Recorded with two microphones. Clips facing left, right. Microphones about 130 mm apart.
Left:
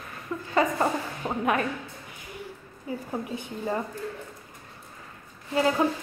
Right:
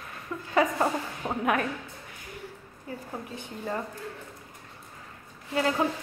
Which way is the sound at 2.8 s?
10° left (ahead or behind).